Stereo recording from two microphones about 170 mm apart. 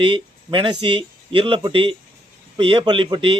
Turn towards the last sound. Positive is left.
turn(degrees=-30)  # may be behind; listen again after turning